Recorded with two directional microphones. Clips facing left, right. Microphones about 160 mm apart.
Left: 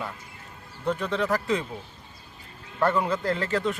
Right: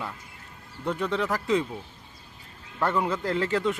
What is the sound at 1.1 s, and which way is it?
Speech, 15° right (ahead or behind).